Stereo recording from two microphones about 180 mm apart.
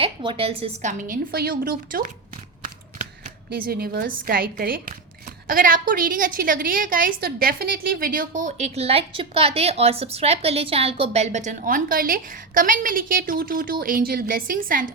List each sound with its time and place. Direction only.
0.0 s speech: 30° right (ahead or behind); by 14.9 s 50° right (ahead or behind)